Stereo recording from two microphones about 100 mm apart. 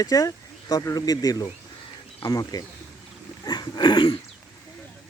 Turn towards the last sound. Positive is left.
turn(degrees=50)  # may be behind; listen again after turning